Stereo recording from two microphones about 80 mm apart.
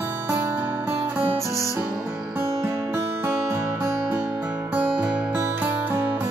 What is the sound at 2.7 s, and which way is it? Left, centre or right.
Music, right.